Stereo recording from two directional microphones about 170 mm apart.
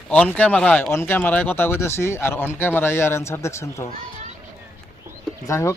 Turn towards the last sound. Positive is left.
turn(degrees=15)  # may be behind; listen again after turning